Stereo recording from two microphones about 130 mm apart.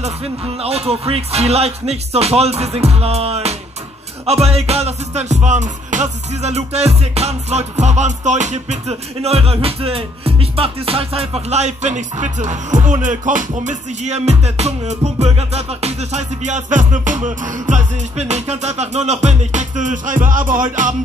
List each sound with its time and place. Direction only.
0.6 s music: 50° right (ahead or behind); by 20.9 s 90° right